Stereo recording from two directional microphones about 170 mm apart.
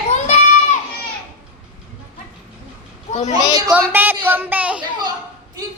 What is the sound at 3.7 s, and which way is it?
Speech, 10° right (ahead or behind).